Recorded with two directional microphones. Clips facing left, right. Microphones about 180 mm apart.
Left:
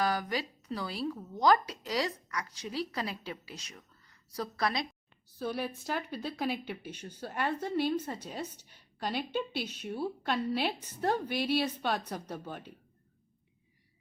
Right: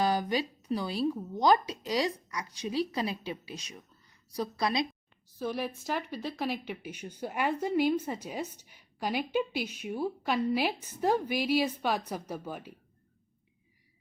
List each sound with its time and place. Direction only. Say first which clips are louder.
0.0 s speech: right 3 dB; 20° right (ahead or behind)
5.4 s speech: right 1 dB; centre (ahead or behind)